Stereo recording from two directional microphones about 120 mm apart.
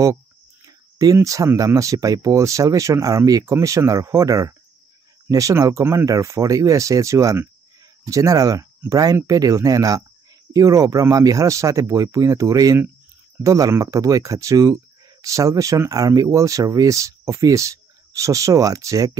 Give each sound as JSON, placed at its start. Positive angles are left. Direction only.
{"t": 0.7, "sound": "speech", "side_deg": -30}